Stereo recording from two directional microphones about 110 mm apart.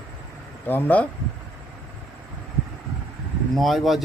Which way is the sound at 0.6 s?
15° left (ahead or behind).